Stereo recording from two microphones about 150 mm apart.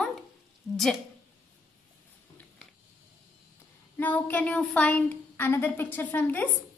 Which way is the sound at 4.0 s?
10° left (ahead or behind).